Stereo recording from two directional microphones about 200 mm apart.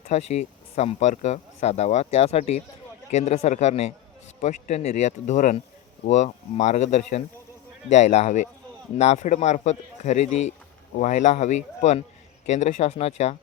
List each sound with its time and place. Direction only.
0.1 s speech: 30° left (ahead or behind)